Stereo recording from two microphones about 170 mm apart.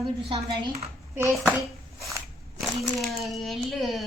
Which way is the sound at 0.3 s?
35° right (ahead or behind).